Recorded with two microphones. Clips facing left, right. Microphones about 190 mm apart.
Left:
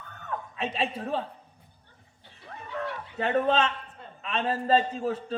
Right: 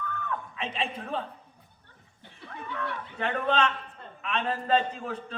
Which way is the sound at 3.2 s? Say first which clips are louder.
Left 3 dB; 35° left (ahead or behind).